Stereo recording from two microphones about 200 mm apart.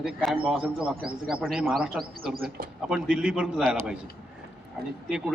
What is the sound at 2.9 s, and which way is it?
A man's voice, 5° right (ahead or behind).